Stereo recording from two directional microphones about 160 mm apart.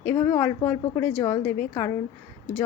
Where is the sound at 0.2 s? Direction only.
20° left (ahead or behind).